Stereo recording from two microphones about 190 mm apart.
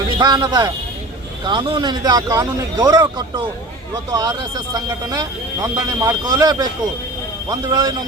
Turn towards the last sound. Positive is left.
turn(degrees=-20)  # may be behind; listen again after turning